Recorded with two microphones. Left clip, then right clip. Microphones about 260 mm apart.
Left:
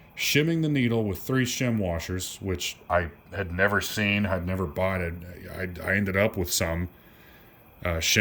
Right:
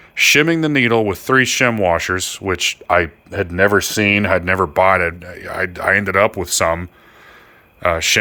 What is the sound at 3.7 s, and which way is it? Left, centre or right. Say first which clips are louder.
Speech: right 11 dB; centre.